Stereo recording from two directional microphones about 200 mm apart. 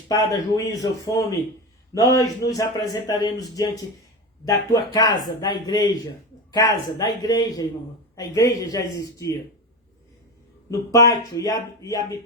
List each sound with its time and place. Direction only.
0.1 s speech: 15° left (ahead or behind)
10.7 s speech: 15° left (ahead or behind)